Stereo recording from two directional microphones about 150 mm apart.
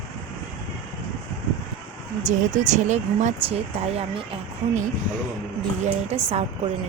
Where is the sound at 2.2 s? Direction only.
55° right (ahead or behind).